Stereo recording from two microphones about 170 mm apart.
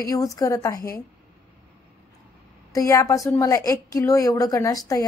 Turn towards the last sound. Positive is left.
turn(degrees=20)  # may be behind; listen again after turning